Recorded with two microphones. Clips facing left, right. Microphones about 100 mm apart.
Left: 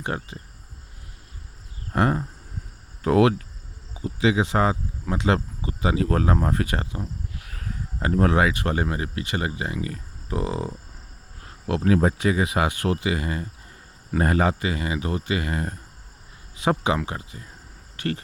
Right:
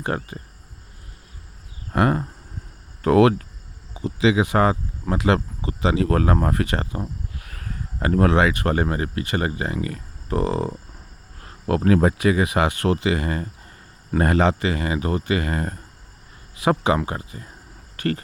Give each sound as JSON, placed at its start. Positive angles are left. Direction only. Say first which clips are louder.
{"t": 0.0, "sound": "speech", "louder": "right 3 dB", "side_deg": -55}
{"t": 1.9, "sound": "speech", "louder": "right 2 dB", "side_deg": -90}
{"t": 3.0, "sound": "speech", "louder": "right 3 dB", "side_deg": -65}
{"t": 3.9, "sound": "speech", "louder": "right 3 dB", "side_deg": -90}
{"t": 7.5, "sound": "a sound", "louder": "even", "side_deg": -70}
{"t": 8.5, "sound": "speech", "louder": "right 3 dB", "side_deg": -55}
{"t": 11.9, "sound": "speech", "louder": "right 3 dB", "side_deg": -90}
{"t": 14.1, "sound": "speech", "louder": "right 3 dB", "side_deg": -70}
{"t": 16.6, "sound": "speech", "louder": "right 3 dB", "side_deg": -90}
{"t": 17.0, "sound": "speech", "louder": "right 3 dB", "side_deg": -35}
{"t": 17.9, "sound": "speech", "louder": "right 4 dB", "side_deg": -50}